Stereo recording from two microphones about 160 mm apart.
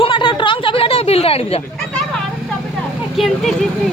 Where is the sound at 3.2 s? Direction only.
Centre (ahead or behind).